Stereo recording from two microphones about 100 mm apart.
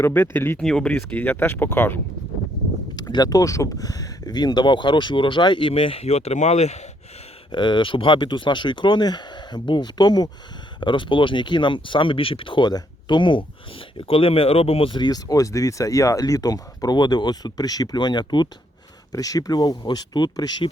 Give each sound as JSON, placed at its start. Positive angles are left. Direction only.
{"t": 0.0, "sound": "speech", "side_deg": 20}
{"t": 0.6, "sound": "speech", "side_deg": 5}
{"t": 1.1, "sound": "speech", "side_deg": 20}
{"t": 2.9, "sound": "speech", "side_deg": 45}
{"t": 7.5, "sound": "speech", "side_deg": 55}
{"t": 14.9, "sound": "speech", "side_deg": 45}
{"t": 19.1, "sound": "speech", "side_deg": 35}